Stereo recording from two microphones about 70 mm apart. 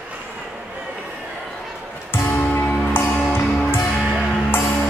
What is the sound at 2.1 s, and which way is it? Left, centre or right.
Music, left.